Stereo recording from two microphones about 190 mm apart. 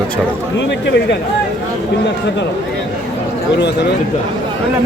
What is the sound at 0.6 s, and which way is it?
Speech, 65° left (ahead or behind).